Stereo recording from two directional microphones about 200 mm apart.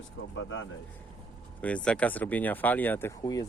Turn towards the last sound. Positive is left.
turn(degrees=15)  # may be behind; listen again after turning